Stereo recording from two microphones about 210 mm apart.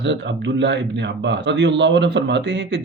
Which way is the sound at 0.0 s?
60° right (ahead or behind).